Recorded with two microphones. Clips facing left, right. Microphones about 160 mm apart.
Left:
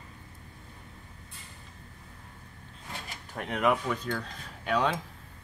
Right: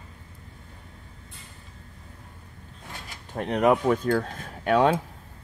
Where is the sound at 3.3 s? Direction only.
30° right (ahead or behind); by 4.9 s 50° right (ahead or behind).